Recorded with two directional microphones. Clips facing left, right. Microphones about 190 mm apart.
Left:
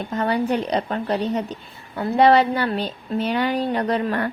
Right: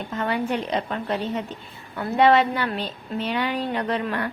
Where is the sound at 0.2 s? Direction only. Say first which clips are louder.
Left 4 dB; 40° left (ahead or behind).